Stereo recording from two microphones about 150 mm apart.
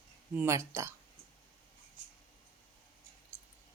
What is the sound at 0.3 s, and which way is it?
Speech, 20° right (ahead or behind).